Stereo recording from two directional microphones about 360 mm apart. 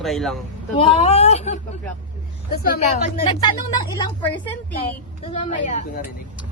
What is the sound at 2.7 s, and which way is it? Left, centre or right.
Speech, left.